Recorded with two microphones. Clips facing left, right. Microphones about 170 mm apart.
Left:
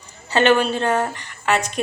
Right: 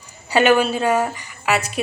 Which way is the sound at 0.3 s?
10° right (ahead or behind).